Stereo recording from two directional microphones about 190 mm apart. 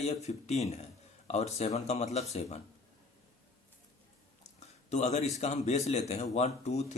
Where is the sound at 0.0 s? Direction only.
35° left (ahead or behind).